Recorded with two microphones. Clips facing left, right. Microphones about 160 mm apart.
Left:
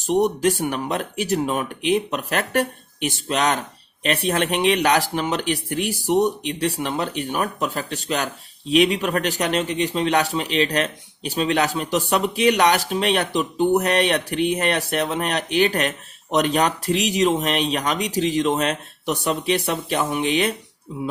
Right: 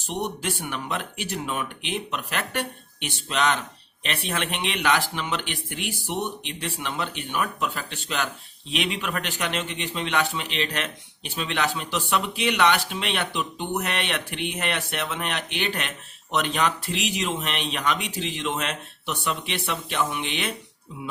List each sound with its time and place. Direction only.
0.0 s a man's voice: 45° left (ahead or behind)